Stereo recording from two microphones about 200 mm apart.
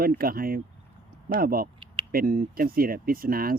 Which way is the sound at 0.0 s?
45° right (ahead or behind).